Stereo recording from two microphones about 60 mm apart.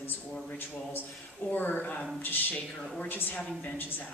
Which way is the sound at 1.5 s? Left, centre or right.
Left.